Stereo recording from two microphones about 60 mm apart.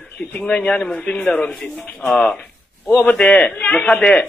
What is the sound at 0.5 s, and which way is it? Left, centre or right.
Speech, centre.